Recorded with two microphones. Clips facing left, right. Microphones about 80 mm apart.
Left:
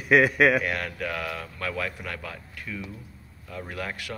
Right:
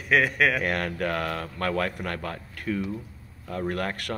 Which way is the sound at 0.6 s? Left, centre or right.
Right.